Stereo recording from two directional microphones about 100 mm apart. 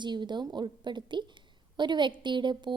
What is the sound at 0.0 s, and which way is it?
A woman's voice, 50° right (ahead or behind).